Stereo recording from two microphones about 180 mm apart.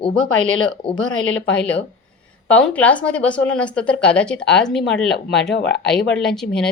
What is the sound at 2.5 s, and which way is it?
Speech, 5° left (ahead or behind).